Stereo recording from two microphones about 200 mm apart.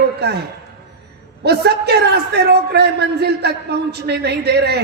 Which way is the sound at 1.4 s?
55° right (ahead or behind).